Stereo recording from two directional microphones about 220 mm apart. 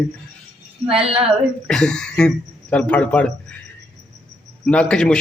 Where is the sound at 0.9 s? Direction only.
25° right (ahead or behind).